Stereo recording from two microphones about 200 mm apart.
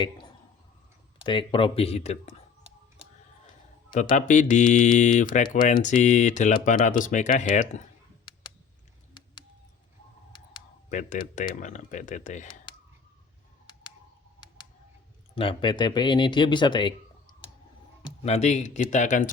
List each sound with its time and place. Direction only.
0.0 s a sound: 20° left (ahead or behind)
1.2 s speech: 25° left (ahead or behind)
4.1 s speech: 40° left (ahead or behind)
8.3 s typing: 20° left (ahead or behind)
10.8 s speech: 40° left (ahead or behind)
12.7 s clicking: 20° left (ahead or behind)
13.7 s a sound: 20° left (ahead or behind)
15.4 s speech: 25° left (ahead or behind)
18.0 s speech: 30° left (ahead or behind)